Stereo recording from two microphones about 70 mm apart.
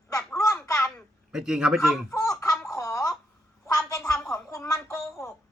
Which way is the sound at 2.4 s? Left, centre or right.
Centre.